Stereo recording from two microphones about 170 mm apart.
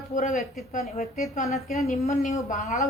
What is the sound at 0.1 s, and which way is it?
Speech, 45° left (ahead or behind).